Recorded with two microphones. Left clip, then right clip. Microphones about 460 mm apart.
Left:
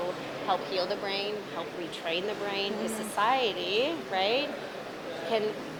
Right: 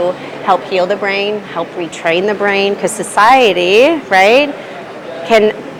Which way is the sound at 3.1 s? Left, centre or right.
Right.